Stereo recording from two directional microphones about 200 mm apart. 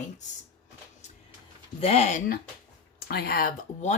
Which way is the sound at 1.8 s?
30° left (ahead or behind).